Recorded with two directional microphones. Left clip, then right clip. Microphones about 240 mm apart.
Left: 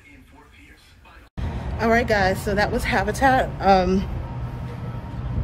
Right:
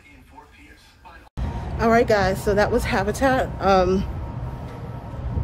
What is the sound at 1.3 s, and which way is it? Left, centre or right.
A woman's voice, centre.